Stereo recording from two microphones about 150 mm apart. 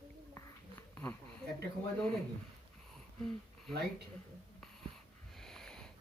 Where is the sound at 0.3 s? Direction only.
20° left (ahead or behind).